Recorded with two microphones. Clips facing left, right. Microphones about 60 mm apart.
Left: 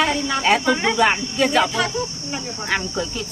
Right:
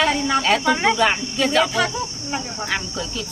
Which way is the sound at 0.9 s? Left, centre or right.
Centre.